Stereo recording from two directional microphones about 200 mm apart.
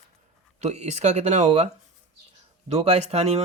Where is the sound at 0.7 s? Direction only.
35° right (ahead or behind).